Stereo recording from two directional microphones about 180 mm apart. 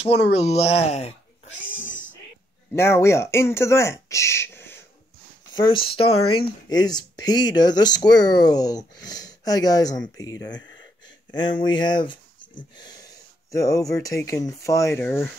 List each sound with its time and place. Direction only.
0.0 s speech: 35° left (ahead or behind)
1.7 s cat: 90° left
2.7 s speech: 15° left (ahead or behind)
5.6 s speech: 30° left (ahead or behind)
11.3 s speech: 25° left (ahead or behind)